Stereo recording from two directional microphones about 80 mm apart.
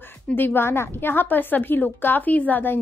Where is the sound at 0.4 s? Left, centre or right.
Left.